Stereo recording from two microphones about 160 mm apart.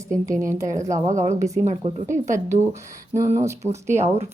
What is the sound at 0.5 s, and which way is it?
Speech, 20° right (ahead or behind).